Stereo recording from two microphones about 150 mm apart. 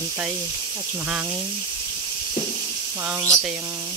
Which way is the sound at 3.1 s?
15° right (ahead or behind).